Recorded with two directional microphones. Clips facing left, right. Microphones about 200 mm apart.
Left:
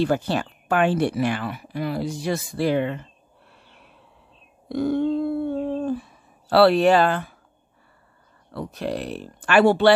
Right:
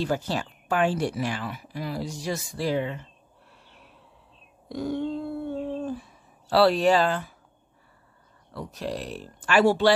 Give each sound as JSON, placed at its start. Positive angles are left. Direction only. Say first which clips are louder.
{"t": 0.0, "sound": "speech", "louder": "left 5 dB", "side_deg": 60}
{"t": 4.6, "sound": "speech", "louder": "left 7 dB", "side_deg": 60}
{"t": 8.5, "sound": "speech", "louder": "left 4 dB", "side_deg": 60}